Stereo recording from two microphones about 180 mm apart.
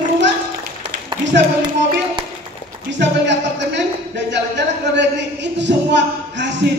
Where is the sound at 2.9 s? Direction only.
80° right.